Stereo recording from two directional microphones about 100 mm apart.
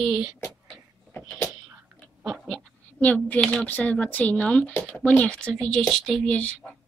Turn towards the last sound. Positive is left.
turn(degrees=10)  # may be behind; listen again after turning